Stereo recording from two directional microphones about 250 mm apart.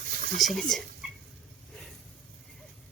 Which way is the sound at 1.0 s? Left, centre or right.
Centre.